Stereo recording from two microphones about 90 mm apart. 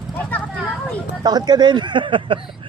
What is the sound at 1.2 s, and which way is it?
Speech, 50° right (ahead or behind).